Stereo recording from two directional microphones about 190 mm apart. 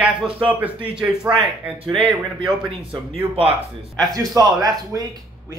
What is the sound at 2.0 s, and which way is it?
Speech, 30° right (ahead or behind).